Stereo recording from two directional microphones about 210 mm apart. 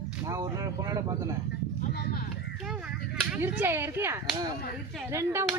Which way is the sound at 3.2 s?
5° right (ahead or behind).